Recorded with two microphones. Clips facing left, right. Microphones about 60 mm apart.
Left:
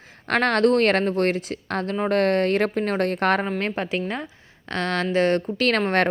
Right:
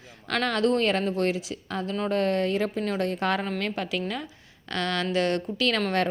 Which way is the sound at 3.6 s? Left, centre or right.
Left.